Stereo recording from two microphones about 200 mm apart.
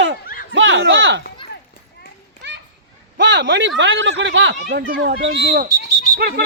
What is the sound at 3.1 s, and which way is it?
Speech, 60° right (ahead or behind).